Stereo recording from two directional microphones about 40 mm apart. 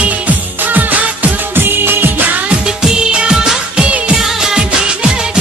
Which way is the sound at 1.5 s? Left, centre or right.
Right.